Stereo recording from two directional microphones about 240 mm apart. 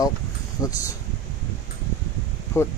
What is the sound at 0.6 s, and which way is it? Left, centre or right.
Speech, centre.